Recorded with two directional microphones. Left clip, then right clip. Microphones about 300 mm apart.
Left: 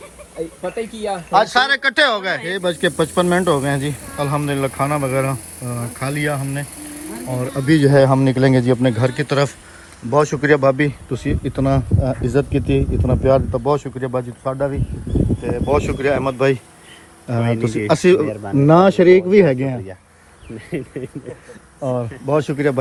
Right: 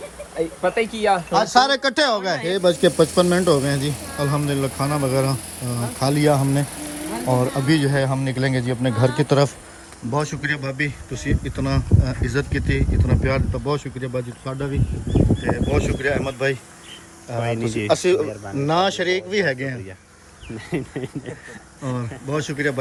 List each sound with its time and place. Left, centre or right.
0.3 s speech: centre
7.4 s speech: centre
10.5 s a man's voice: centre
15.7 s a man's voice: centre
20.7 s speech: centre
22.3 s a man's voice: centre